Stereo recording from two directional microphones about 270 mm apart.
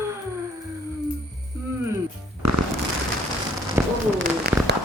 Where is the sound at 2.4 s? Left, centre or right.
Right.